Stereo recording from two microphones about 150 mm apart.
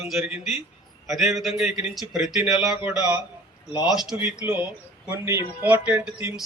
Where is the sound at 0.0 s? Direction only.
5° right (ahead or behind).